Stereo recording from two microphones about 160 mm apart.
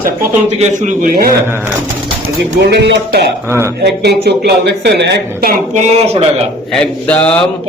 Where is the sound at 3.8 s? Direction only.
90° right.